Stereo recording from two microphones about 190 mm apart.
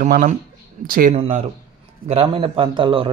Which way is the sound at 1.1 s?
35° right (ahead or behind).